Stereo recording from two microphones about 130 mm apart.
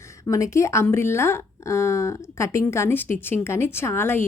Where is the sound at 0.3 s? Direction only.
25° left (ahead or behind).